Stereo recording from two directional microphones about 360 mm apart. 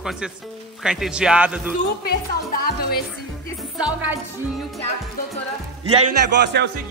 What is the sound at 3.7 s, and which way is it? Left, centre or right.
Speech, centre.